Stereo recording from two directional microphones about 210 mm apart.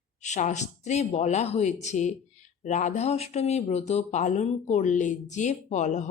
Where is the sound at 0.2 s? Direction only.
35° left (ahead or behind).